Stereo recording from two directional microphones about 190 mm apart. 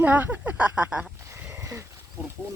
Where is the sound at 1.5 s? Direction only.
15° right (ahead or behind).